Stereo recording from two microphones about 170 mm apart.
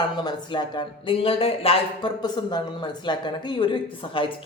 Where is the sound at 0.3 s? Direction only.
25° left (ahead or behind).